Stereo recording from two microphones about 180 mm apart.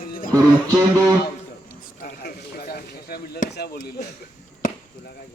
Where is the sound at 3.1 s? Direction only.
60° left (ahead or behind).